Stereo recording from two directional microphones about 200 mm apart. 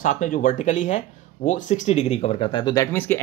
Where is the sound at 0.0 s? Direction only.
40° left (ahead or behind).